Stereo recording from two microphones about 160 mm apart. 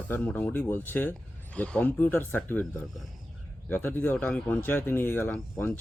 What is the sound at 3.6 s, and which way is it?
Speech, 10° left (ahead or behind).